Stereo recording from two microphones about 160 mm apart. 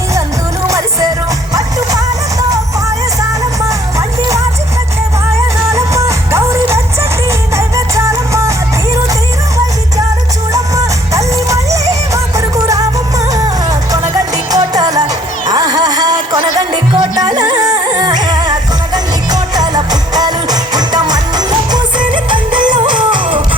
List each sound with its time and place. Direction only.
0.7 s music: 20° right (ahead or behind)
3.7 s music: 20° right (ahead or behind)
5.7 s music: 20° right (ahead or behind)
10.5 s music: 20° right (ahead or behind)